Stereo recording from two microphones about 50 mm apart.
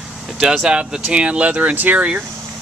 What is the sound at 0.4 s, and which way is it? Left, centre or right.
Speech, centre.